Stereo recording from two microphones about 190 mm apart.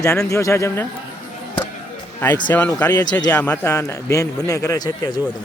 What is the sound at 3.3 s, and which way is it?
A man's voice, 10° left (ahead or behind).